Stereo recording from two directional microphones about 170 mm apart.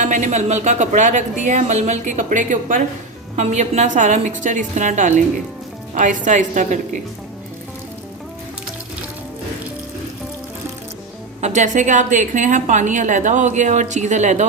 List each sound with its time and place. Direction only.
0.0 s a woman's voice: 45° right (ahead or behind)
11.3 s a woman's voice: 45° right (ahead or behind)